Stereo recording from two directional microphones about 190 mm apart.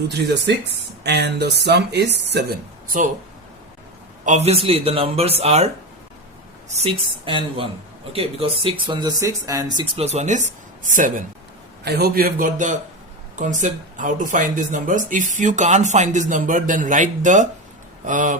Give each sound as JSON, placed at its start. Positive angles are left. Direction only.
{"t": 1.0, "sound": "speech", "side_deg": -60}
{"t": 4.3, "sound": "speech", "side_deg": -35}
{"t": 11.9, "sound": "a man's voice", "side_deg": -55}